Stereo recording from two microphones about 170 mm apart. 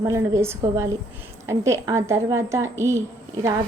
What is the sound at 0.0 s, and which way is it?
A woman's voice, 15° right (ahead or behind).